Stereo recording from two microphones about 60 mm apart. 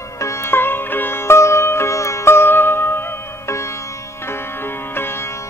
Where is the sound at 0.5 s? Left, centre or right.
Left.